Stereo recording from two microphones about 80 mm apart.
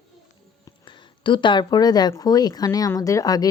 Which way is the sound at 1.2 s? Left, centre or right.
Left.